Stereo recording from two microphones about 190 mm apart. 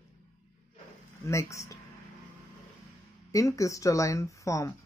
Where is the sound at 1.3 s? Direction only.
15° left (ahead or behind).